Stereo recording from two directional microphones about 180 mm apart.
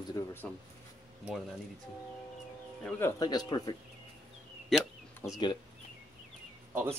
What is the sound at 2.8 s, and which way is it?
Speech, 5° left (ahead or behind).